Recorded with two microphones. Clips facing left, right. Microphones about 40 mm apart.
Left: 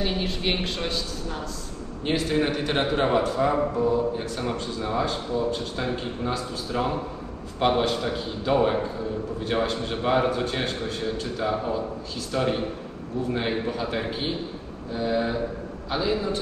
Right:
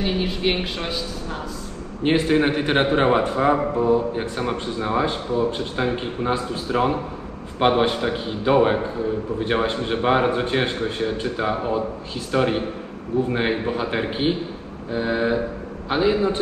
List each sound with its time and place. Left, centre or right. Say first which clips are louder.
0.0 s a woman's voice: right 4 dB; centre
2.0 s a man's voice: right 6 dB; right